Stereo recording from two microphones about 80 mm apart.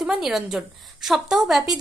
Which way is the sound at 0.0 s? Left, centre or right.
Centre.